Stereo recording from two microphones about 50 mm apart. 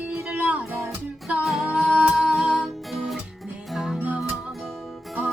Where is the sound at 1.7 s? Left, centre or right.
Centre.